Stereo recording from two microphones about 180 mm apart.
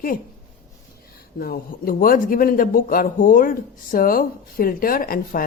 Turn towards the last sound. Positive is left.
turn(degrees=50)  # may be behind; listen again after turning